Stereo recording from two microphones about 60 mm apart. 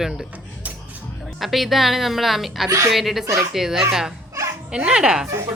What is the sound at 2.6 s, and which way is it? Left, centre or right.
Speech, right.